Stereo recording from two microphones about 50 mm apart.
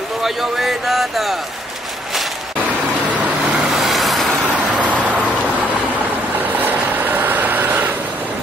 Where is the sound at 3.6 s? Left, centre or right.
Centre.